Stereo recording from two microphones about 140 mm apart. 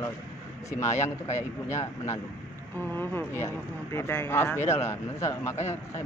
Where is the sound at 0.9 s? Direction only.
55° left (ahead or behind).